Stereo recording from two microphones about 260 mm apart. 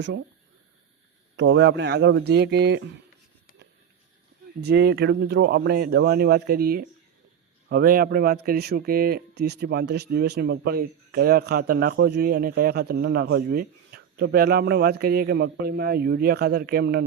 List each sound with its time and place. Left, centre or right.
1.4 s speech: right
4.6 s speech: right